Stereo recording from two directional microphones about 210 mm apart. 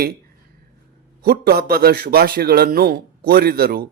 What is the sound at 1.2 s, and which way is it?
A man's voice, 50° right (ahead or behind).